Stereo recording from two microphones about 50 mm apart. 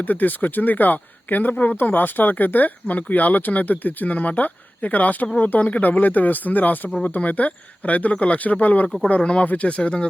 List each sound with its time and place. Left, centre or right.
0.0 s speech: left